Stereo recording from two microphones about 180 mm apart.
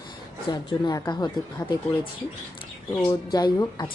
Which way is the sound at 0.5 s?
25° left (ahead or behind).